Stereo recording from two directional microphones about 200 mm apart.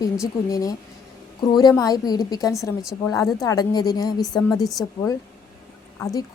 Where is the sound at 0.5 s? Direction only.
20° left (ahead or behind).